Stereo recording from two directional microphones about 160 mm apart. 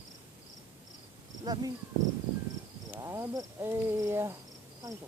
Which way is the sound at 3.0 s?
20° right (ahead or behind).